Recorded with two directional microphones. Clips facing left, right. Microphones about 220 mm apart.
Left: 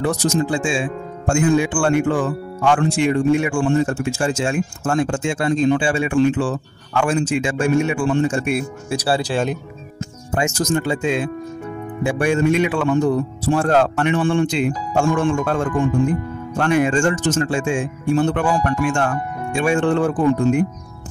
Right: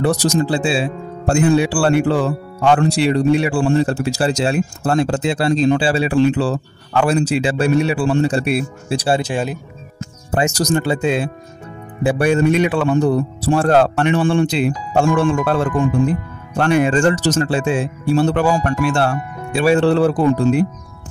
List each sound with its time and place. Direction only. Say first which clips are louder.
0.0 s speech: right 3 dB; 35° right (ahead or behind)
10.3 s speech: right 2 dB; 35° right (ahead or behind)